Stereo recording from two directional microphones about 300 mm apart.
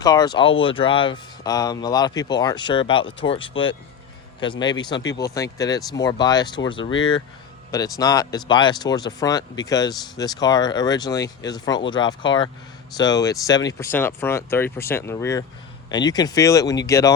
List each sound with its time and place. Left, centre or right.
0.0 s speech: centre